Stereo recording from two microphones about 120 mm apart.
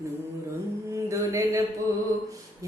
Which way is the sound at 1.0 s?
25° right (ahead or behind).